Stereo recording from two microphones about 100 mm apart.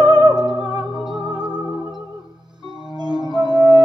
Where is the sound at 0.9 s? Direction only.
5° right (ahead or behind).